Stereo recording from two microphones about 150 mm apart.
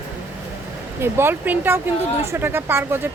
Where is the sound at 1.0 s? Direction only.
15° right (ahead or behind).